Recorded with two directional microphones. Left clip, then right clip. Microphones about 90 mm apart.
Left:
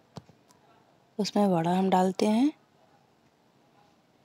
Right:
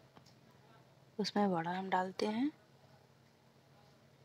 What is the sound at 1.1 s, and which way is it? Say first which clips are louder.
A woman's voice: left 8 dB; 40° left (ahead or behind).